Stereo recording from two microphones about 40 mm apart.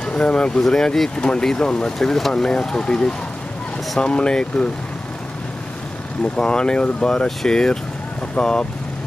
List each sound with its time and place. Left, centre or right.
0.0 s speech: left
0.6 s speech: centre
2.0 s speech: centre
2.3 s speech: centre
6.3 s speech: left